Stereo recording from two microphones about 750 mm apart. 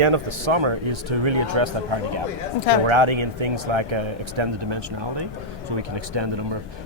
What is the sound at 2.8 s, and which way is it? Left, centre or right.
Speech, right.